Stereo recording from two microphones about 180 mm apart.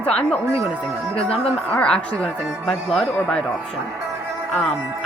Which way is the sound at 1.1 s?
35° left (ahead or behind).